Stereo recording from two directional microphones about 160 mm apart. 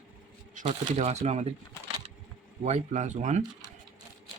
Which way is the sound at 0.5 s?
50° right (ahead or behind).